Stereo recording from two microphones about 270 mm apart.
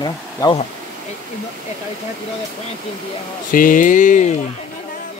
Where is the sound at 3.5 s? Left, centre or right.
Left.